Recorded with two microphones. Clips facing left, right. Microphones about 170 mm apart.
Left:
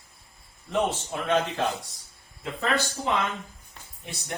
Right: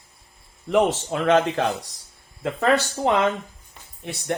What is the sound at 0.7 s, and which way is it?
Speech, 90° right.